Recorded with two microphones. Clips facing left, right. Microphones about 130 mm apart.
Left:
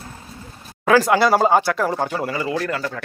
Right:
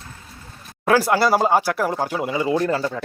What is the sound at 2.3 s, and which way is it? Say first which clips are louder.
Speech: right 2 dB; 20° right (ahead or behind).